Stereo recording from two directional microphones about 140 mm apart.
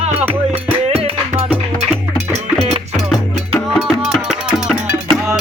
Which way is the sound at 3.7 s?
Centre (ahead or behind).